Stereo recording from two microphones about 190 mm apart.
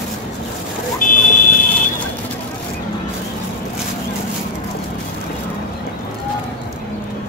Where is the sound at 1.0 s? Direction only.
45° left (ahead or behind).